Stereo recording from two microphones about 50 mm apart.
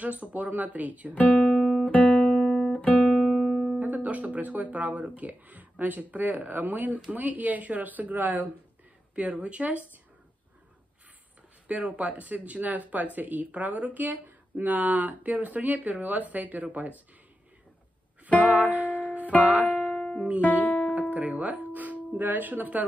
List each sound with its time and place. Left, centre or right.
0.0 s speech: right
1.1 s speech: left
1.9 s music: left
2.1 s guitar: centre
2.7 s guitar: left
3.8 s speech: right
11.6 s speech: right
18.4 s music: right
20.0 s music: centre
21.1 s music: right